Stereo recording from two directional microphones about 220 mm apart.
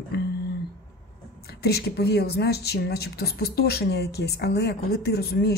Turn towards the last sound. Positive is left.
turn(degrees=45)  # may be behind; listen again after turning